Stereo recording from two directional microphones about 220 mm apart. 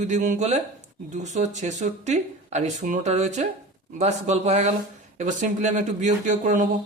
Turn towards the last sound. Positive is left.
turn(degrees=-35)  # may be behind; listen again after turning